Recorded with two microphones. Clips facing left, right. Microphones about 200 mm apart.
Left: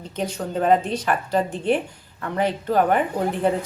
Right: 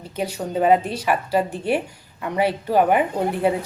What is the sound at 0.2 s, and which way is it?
Speech, 10° right (ahead or behind).